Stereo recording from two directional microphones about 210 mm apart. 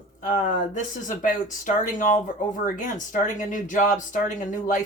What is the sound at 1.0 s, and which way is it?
Speech, 40° left (ahead or behind).